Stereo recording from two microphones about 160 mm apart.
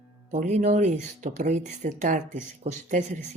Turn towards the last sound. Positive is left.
turn(degrees=-50)  # may be behind; listen again after turning